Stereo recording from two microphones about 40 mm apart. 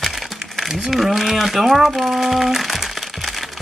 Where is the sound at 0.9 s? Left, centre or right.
Centre.